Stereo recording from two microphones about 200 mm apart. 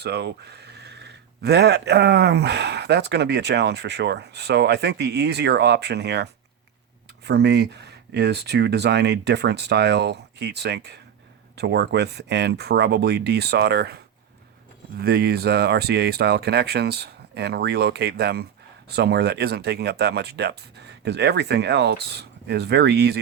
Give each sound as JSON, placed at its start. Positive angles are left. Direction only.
{"t": 0.0, "sound": "speech", "side_deg": -55}
{"t": 7.3, "sound": "speech", "side_deg": -55}
{"t": 15.0, "sound": "speech", "side_deg": -50}